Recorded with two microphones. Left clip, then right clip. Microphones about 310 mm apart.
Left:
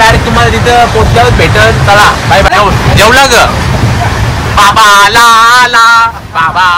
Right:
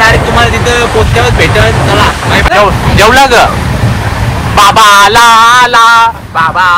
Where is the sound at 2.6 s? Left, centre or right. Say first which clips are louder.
Even; centre.